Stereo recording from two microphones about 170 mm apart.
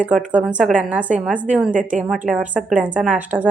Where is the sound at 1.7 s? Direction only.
50° right (ahead or behind).